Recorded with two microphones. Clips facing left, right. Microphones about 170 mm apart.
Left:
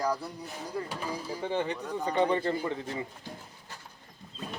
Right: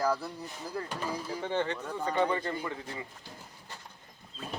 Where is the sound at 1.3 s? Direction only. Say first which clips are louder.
Left 1 dB; 10° left (ahead or behind).